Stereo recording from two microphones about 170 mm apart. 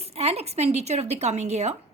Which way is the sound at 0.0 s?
35° right (ahead or behind).